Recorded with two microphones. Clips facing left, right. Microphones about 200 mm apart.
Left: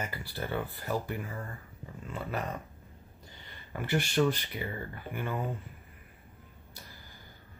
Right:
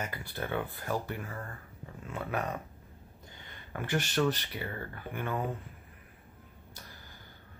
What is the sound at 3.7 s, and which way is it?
Speech, 10° left (ahead or behind).